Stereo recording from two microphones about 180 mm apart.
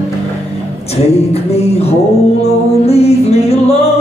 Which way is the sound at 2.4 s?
35° left (ahead or behind).